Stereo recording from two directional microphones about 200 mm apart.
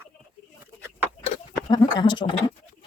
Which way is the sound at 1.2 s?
20° left (ahead or behind).